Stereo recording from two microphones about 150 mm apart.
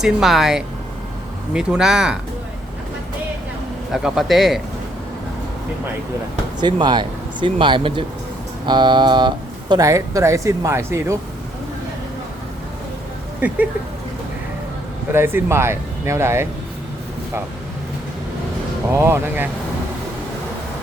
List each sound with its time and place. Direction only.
0.0 s a man's voice: centre (ahead or behind)
3.9 s a man's voice: centre (ahead or behind)
6.6 s speech: 30° right (ahead or behind)
13.4 s speech: 10° right (ahead or behind)
15.1 s speech: 15° right (ahead or behind)
18.9 s speech: 20° right (ahead or behind)